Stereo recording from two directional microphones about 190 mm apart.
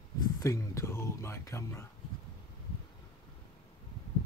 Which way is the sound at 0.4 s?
15° left (ahead or behind).